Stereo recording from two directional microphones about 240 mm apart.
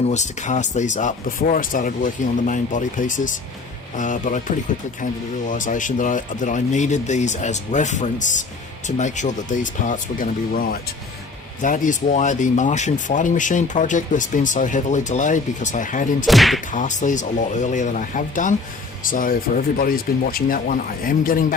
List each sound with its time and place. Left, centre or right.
0.1 s speech: left
16.2 s whip: centre
16.7 s speech: left